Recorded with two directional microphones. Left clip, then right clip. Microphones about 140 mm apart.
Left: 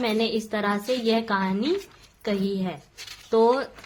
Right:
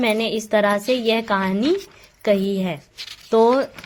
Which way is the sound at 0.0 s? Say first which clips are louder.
Right 4 dB; 45° right (ahead or behind).